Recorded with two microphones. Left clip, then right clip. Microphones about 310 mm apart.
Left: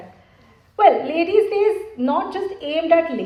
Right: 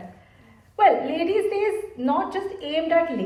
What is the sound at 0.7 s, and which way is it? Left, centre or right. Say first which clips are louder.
A woman's voice: left 4 dB; left.